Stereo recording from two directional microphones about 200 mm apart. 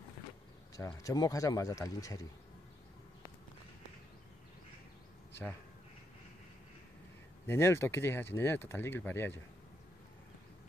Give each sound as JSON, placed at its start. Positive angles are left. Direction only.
{"t": 0.7, "sound": "speech", "side_deg": 20}
{"t": 7.4, "sound": "speech", "side_deg": 10}